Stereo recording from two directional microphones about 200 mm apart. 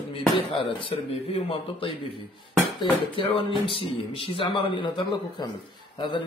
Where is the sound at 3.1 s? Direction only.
25° left (ahead or behind).